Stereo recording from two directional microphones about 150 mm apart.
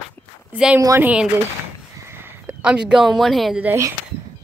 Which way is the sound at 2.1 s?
15° right (ahead or behind).